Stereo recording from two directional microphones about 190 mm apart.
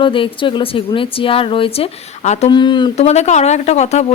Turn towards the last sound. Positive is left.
turn(degrees=35)  # may be behind; listen again after turning